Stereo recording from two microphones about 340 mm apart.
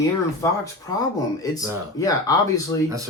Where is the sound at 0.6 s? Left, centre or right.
Centre.